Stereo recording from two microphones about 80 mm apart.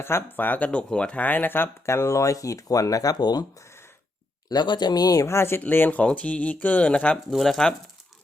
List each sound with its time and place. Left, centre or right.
0.0 s speech: left
4.4 s speech: left
5.2 s speech: left; by 7.2 s centre
7.3 s speech: centre